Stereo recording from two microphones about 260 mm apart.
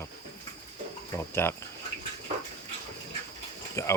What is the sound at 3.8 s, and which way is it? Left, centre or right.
Speech, centre.